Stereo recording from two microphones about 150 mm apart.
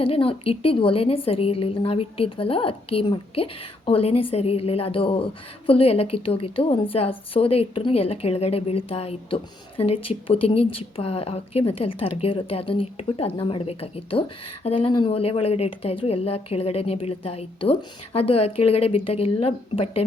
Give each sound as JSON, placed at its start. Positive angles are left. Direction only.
{"t": 0.0, "sound": "a woman's voice", "side_deg": 40}